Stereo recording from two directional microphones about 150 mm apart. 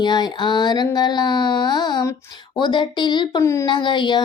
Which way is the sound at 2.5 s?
30° left (ahead or behind).